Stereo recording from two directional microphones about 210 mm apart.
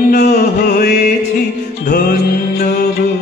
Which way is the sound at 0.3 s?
45° left (ahead or behind).